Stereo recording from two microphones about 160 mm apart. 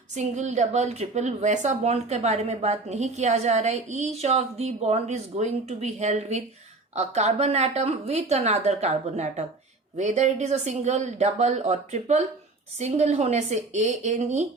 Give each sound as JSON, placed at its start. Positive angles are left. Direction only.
{"t": 0.2, "sound": "a woman's voice", "side_deg": -45}